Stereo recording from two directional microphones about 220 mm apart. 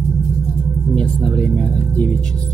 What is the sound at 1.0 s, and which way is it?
Speech, 5° left (ahead or behind).